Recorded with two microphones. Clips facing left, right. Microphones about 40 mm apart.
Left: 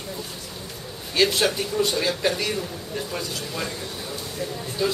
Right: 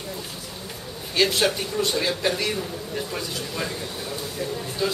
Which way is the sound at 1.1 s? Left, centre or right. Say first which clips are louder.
Even; centre.